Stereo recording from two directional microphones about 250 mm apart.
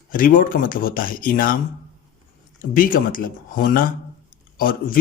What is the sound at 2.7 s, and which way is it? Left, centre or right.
Speech, left.